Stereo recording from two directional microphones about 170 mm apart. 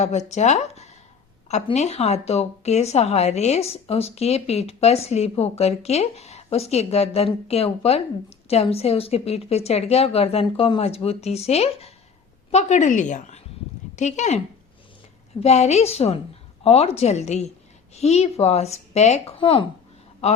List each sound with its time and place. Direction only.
0.0 s a woman's voice: 40° left (ahead or behind)